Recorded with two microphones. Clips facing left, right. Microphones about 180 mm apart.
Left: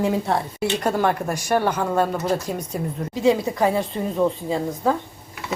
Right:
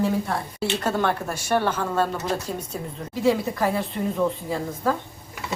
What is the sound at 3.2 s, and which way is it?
A woman's voice, 20° left (ahead or behind).